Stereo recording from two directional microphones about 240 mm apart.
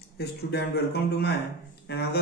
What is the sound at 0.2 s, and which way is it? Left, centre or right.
Speech, left.